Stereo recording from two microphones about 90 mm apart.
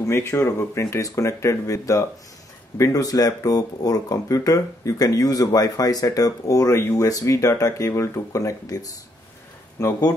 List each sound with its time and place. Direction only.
0.0 s speech: 30° left (ahead or behind)